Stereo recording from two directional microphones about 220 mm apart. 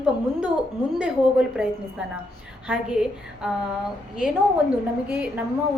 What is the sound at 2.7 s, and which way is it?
Speech, 5° right (ahead or behind).